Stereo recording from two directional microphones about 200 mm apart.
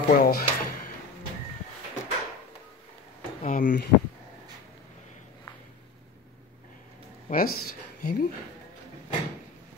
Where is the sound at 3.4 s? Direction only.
40° left (ahead or behind).